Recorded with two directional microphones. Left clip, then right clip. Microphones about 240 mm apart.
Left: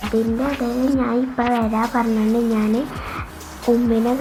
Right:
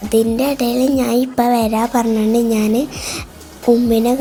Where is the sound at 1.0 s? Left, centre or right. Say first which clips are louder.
Right 5 dB; right.